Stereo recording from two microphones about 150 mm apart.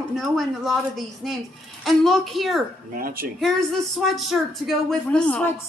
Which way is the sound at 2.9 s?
70° right (ahead or behind).